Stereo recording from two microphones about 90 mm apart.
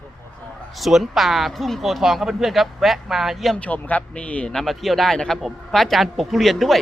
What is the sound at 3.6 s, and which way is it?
Speech, 15° left (ahead or behind).